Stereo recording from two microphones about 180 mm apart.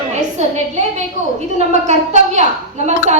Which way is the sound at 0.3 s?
40° right (ahead or behind).